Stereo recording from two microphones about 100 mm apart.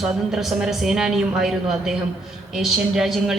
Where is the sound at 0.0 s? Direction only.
5° right (ahead or behind).